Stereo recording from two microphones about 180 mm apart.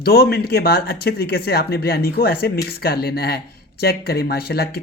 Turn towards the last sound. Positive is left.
turn(degrees=60)  # may be behind; listen again after turning